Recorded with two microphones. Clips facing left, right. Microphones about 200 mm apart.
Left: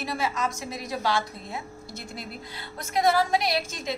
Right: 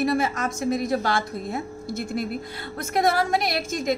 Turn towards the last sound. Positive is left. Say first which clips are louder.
# right 3 dB
turn(degrees=-50)  # may be behind; listen again after turning